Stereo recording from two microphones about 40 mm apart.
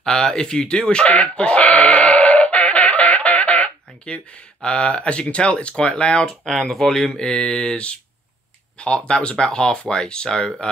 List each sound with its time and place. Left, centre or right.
0.0 s speech: centre
1.7 s music: left
4.0 s speech: left
6.2 s speech: centre
7.7 s speech: left